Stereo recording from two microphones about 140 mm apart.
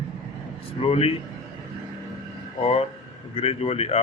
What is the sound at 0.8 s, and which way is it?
Speech, 45° left (ahead or behind).